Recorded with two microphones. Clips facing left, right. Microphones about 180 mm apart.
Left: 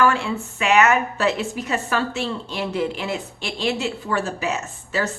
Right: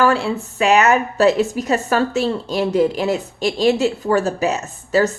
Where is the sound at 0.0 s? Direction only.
35° right (ahead or behind).